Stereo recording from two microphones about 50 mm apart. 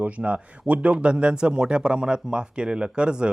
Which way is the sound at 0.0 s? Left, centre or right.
Right.